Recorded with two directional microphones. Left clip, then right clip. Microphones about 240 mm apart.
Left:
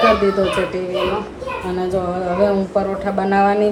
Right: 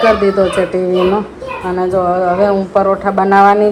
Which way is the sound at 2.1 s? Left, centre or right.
Centre.